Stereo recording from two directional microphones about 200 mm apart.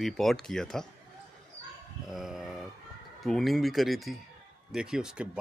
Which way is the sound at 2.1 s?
Centre (ahead or behind).